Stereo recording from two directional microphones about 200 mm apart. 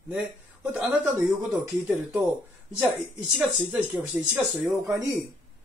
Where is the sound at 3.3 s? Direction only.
5° right (ahead or behind).